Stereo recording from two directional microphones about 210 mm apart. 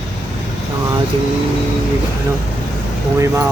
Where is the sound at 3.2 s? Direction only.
15° right (ahead or behind).